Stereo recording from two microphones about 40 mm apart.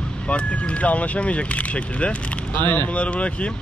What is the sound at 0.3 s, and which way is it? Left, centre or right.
Speech, left.